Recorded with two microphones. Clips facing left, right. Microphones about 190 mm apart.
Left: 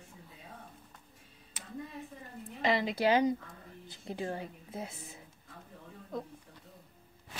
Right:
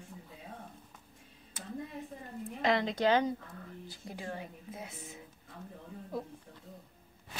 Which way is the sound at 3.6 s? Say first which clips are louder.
Even; 25° left (ahead or behind).